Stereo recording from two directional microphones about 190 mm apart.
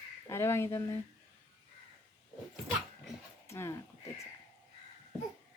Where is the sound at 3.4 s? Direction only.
15° left (ahead or behind).